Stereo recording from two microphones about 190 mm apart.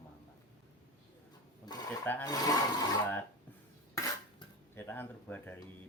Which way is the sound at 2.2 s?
20° left (ahead or behind).